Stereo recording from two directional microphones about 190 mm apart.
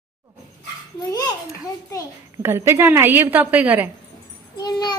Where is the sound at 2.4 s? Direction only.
15° right (ahead or behind).